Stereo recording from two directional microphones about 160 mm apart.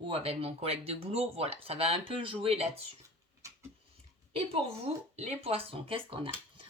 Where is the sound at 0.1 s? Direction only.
35° right (ahead or behind).